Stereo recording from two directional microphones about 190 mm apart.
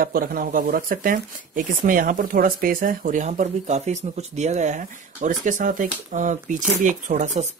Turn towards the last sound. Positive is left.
turn(degrees=-40)  # may be behind; listen again after turning